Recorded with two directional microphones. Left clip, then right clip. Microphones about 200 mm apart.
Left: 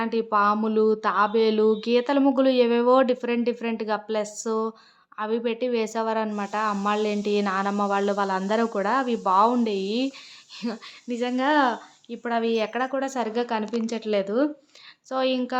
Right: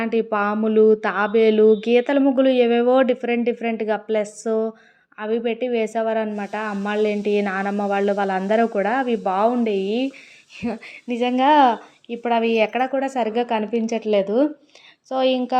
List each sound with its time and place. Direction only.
0.0 s speech: 5° right (ahead or behind)
10.6 s speech: 5° right (ahead or behind)